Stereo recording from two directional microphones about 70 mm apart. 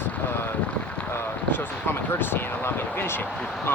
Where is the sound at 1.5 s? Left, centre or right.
Left.